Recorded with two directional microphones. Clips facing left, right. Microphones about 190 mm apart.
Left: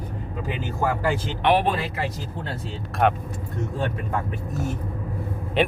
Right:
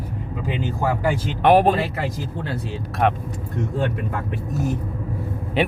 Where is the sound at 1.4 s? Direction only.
45° right (ahead or behind).